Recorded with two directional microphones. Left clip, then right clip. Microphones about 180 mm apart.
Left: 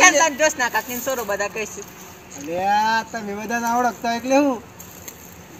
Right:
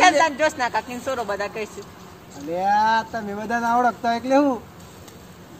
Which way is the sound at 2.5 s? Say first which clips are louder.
Even; 5° left (ahead or behind).